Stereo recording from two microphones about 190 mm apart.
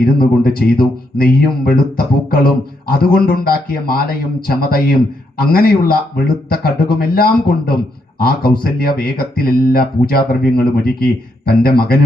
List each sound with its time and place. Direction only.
0.0 s speech: 50° left (ahead or behind)